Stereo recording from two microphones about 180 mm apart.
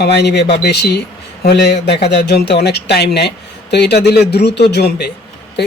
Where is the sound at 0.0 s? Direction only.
70° left (ahead or behind).